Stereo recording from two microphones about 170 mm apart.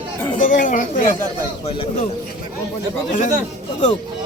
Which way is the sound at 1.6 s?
35° left (ahead or behind).